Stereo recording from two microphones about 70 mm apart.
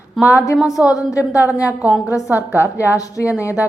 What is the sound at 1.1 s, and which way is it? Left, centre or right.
A woman's voice, left.